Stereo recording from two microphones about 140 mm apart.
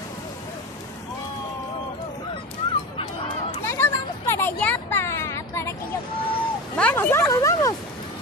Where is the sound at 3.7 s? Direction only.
20° left (ahead or behind).